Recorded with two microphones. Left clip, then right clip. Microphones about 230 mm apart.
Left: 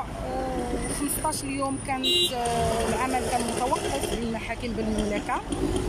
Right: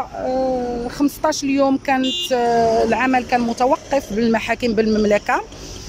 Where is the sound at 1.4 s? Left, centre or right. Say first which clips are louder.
Right 12 dB; right.